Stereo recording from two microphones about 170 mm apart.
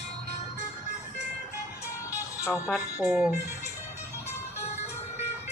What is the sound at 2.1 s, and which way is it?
Music, 20° left (ahead or behind).